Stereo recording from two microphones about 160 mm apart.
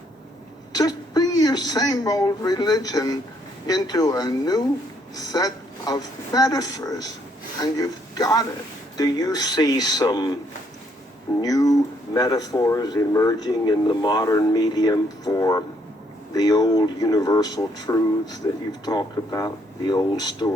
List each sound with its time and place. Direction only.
0.7 s speech: 25° left (ahead or behind)
11.3 s speech: 25° left (ahead or behind)